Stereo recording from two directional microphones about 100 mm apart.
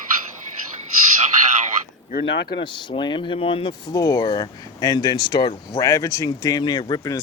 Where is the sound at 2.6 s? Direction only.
55° left (ahead or behind).